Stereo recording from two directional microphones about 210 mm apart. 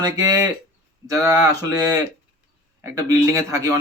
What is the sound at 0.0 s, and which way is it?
Speech, 15° right (ahead or behind).